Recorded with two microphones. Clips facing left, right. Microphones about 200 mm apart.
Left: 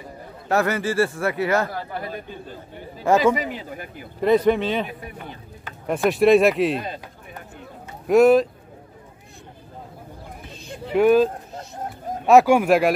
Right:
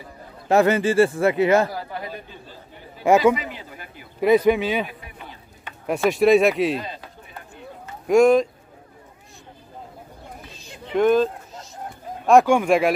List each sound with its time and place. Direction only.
0.5 s speech: 20° right (ahead or behind)
3.0 s speech: 10° right (ahead or behind)
5.9 s speech: centre (ahead or behind)
8.1 s speech: 5° left (ahead or behind)
10.9 s speech: 10° left (ahead or behind)
12.3 s speech: 5° left (ahead or behind)